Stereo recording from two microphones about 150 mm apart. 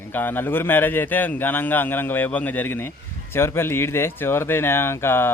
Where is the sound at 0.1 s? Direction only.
10° left (ahead or behind).